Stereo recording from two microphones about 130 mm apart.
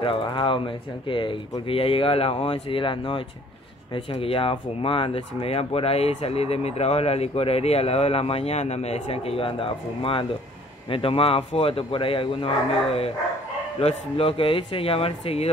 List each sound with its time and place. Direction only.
0.0 s speech: 40° left (ahead or behind)